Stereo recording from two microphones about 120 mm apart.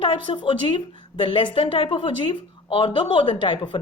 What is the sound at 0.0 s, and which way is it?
A woman's voice, 45° left (ahead or behind).